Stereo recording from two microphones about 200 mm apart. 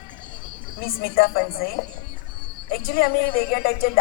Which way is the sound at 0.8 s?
45° left (ahead or behind).